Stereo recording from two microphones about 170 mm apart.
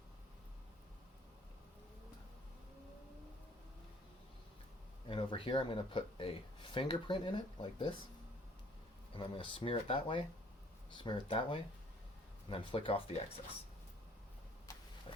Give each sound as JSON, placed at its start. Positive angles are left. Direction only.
{"t": 5.0, "sound": "speech", "side_deg": 30}
{"t": 9.1, "sound": "speech", "side_deg": 30}